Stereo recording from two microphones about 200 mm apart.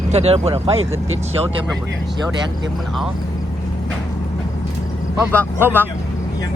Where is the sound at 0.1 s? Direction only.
30° right (ahead or behind).